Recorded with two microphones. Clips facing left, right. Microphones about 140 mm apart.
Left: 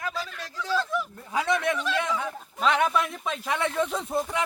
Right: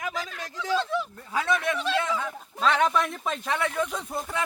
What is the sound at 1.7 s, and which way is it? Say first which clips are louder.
Speech: right 1 dB; 25° right (ahead or behind).